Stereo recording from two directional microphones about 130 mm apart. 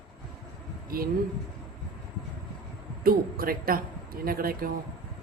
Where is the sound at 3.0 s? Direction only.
90° right.